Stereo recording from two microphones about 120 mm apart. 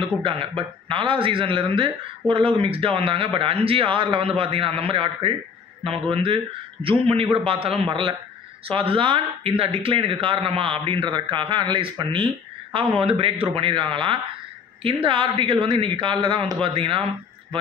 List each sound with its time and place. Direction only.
0.0 s a man's voice: 50° right (ahead or behind)